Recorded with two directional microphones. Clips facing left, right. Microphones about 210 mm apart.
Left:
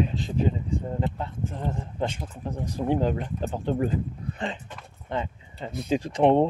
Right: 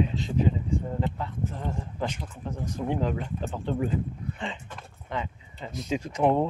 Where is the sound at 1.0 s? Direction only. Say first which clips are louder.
Left 1 dB; 25° left (ahead or behind).